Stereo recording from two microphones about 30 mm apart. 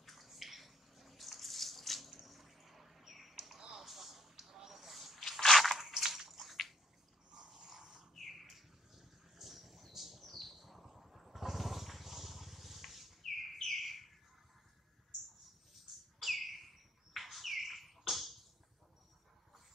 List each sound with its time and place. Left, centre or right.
0.0 s a sound: centre
5.8 s crushing: centre
6.0 s bathtub: centre
6.3 s a sound: centre
7.4 s snoring: centre
8.1 s bird: centre
16.2 s bird: centre